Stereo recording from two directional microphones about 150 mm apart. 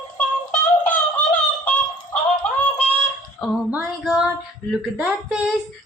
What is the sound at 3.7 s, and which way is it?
Female singing, 10° right (ahead or behind).